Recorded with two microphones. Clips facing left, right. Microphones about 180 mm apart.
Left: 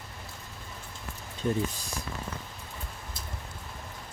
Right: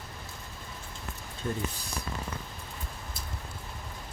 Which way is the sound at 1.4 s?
20° left (ahead or behind).